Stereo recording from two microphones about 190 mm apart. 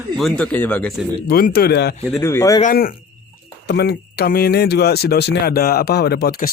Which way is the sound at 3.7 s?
60° left (ahead or behind).